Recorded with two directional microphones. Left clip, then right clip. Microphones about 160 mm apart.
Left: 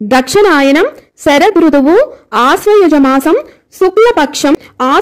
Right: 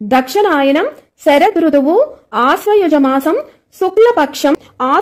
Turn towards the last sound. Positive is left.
turn(degrees=20)  # may be behind; listen again after turning